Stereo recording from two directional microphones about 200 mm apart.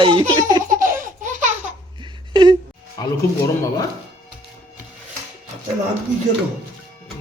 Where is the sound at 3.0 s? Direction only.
20° left (ahead or behind).